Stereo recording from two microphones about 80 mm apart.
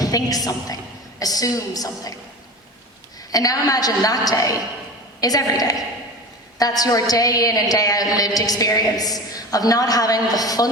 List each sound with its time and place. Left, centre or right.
0.0 s a woman's voice: left
3.2 s a woman's voice: left